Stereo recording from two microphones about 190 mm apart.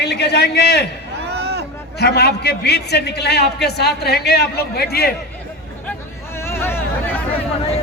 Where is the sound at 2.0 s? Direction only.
60° left (ahead or behind).